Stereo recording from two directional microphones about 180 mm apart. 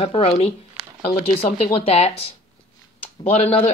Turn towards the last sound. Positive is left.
turn(degrees=35)  # may be behind; listen again after turning